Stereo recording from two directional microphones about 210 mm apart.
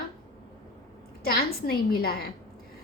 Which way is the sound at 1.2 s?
45° left (ahead or behind).